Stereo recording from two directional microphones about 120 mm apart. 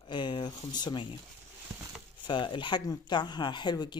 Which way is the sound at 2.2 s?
40° left (ahead or behind).